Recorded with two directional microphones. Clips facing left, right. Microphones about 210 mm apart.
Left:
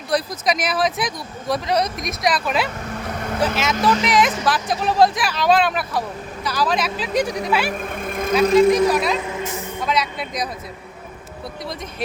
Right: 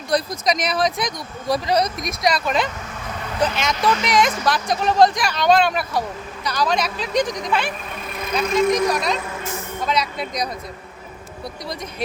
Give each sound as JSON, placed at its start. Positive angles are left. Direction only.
{"t": 0.1, "sound": "speech", "side_deg": 5}
{"t": 7.8, "sound": "vehicle", "side_deg": 50}
{"t": 8.9, "sound": "speech", "side_deg": 5}
{"t": 9.3, "sound": "music", "side_deg": 20}
{"t": 9.8, "sound": "speech", "side_deg": 0}